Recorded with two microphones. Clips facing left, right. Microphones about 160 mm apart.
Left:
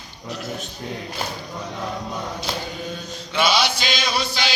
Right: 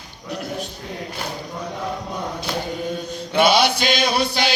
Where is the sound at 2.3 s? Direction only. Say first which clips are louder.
Right 3 dB; 55° right (ahead or behind).